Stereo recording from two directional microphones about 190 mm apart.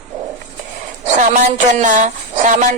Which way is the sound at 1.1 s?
40° right (ahead or behind).